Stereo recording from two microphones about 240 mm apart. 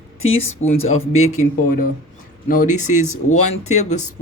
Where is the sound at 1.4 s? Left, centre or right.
Left.